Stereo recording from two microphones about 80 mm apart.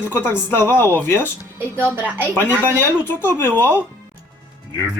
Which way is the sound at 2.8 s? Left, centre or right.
Left.